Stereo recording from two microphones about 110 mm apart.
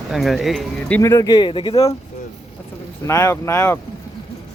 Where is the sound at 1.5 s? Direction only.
50° left (ahead or behind).